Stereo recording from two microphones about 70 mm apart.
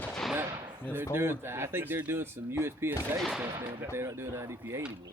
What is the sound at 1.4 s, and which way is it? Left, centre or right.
Speech, right.